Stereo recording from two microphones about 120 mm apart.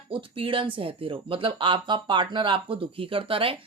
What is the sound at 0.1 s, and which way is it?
Speech, 45° right (ahead or behind).